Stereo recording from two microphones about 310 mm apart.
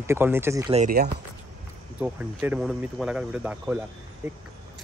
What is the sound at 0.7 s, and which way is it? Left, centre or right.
Speech, right.